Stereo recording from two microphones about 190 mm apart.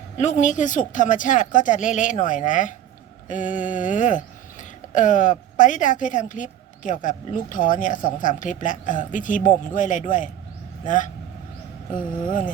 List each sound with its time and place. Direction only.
0.2 s a woman's voice: 40° left (ahead or behind)